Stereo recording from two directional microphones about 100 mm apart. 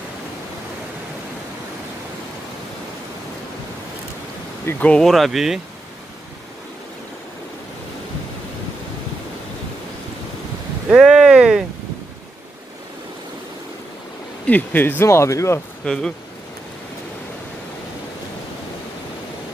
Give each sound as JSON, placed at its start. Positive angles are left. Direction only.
{"t": 4.6, "sound": "speech", "side_deg": 15}
{"t": 10.9, "sound": "a sound", "side_deg": -5}
{"t": 14.4, "sound": "speech", "side_deg": 15}
{"t": 15.8, "sound": "speech", "side_deg": 10}